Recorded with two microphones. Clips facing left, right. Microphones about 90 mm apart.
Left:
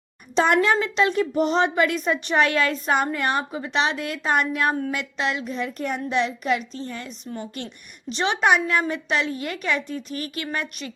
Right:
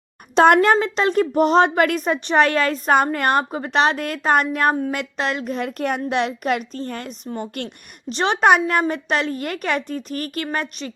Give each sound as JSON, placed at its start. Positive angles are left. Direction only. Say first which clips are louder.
{"t": 0.3, "sound": "a woman's voice", "louder": "right 6 dB", "side_deg": -55}
{"t": 0.8, "sound": "a woman's voice", "louder": "right 3 dB", "side_deg": -40}
{"t": 8.1, "sound": "a woman's voice", "louder": "right 4 dB", "side_deg": -40}